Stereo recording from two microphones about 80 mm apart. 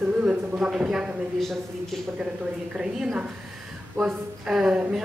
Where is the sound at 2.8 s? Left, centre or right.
Centre.